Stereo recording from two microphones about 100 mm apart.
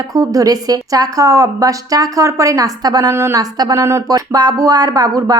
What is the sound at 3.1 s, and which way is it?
A woman's voice, 25° right (ahead or behind).